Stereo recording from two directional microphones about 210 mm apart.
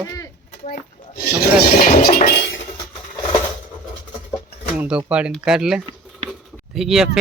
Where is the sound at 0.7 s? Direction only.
45° left (ahead or behind).